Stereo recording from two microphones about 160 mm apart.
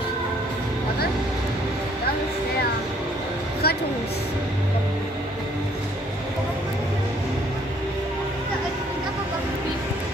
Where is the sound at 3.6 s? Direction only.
75° left (ahead or behind).